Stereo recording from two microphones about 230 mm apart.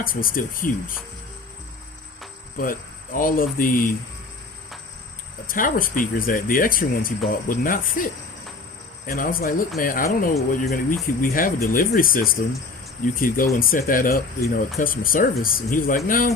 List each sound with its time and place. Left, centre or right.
0.0 s speech: left
2.6 s speech: left
5.5 s speech: left